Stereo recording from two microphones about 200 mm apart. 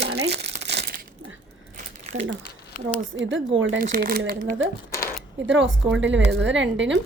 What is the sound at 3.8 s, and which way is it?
Speech, 45° right (ahead or behind).